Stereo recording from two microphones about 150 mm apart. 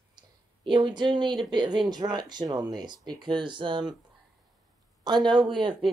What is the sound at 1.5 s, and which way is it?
Speech, 30° right (ahead or behind).